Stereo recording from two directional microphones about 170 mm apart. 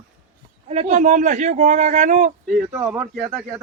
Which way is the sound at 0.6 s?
40° right (ahead or behind).